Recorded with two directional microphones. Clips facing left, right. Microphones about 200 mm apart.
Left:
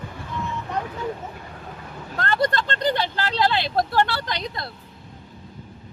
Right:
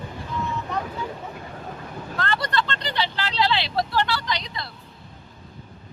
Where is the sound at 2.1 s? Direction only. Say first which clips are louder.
Left 3 dB; 45° left (ahead or behind).